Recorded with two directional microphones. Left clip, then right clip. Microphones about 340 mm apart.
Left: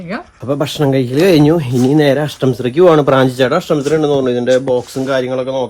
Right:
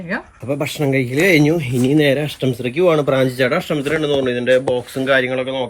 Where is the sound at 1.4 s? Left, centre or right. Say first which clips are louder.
Left 5 dB; left.